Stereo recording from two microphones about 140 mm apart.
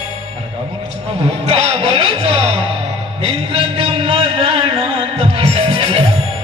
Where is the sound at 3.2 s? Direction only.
45° right (ahead or behind).